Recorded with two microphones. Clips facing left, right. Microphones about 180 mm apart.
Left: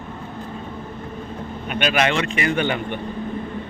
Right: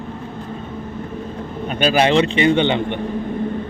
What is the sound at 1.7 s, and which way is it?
A man's voice, 30° right (ahead or behind).